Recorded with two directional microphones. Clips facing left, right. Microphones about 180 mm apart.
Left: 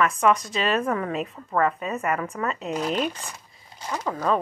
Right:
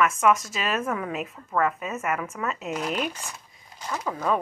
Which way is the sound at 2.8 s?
30° left (ahead or behind).